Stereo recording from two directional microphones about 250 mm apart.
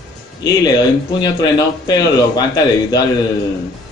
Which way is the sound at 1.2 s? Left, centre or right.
Centre.